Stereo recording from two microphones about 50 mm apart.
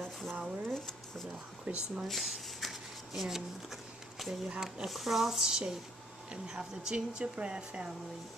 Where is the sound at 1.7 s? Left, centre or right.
Right.